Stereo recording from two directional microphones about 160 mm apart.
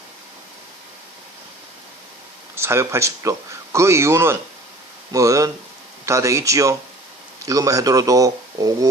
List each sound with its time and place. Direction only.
2.6 s speech: 15° right (ahead or behind)